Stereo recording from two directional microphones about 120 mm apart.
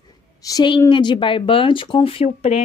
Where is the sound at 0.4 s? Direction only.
30° left (ahead or behind).